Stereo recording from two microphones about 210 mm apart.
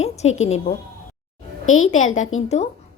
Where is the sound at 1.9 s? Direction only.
35° left (ahead or behind).